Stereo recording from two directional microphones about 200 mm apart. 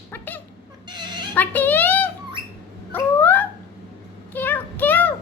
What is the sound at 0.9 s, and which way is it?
Chicken, 20° right (ahead or behind).